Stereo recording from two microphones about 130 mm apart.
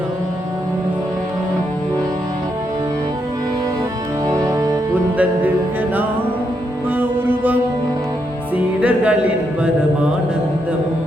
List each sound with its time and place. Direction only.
4.3 s music: 30° right (ahead or behind)
5.1 s music: 10° right (ahead or behind)
7.0 s music: 15° right (ahead or behind)
8.8 s music: 10° right (ahead or behind)